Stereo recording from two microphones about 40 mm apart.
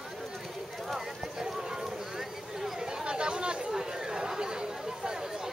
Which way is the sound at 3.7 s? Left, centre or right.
Centre.